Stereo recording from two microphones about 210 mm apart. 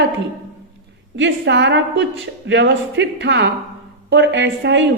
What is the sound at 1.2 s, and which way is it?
A woman's voice, 55° right (ahead or behind).